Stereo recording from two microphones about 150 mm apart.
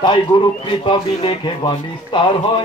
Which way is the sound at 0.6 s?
35° left (ahead or behind).